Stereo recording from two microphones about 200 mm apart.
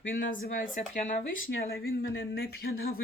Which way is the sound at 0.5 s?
40° left (ahead or behind).